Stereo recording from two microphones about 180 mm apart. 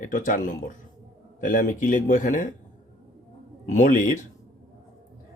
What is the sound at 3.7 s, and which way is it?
Speech, 45° left (ahead or behind).